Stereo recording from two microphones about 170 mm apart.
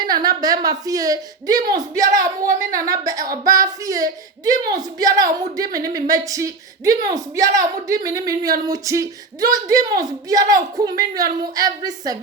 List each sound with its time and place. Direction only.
0.0 s speech: 25° right (ahead or behind)